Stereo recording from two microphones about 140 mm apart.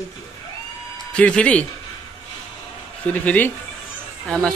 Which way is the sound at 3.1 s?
10° left (ahead or behind).